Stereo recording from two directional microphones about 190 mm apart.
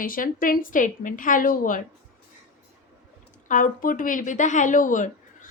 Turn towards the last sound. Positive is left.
turn(degrees=40)  # may be behind; listen again after turning